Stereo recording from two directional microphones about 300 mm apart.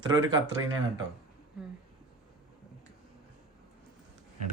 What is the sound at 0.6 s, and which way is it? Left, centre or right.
Speech, centre.